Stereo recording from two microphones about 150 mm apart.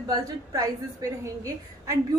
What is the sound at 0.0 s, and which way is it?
A woman's voice, 25° right (ahead or behind).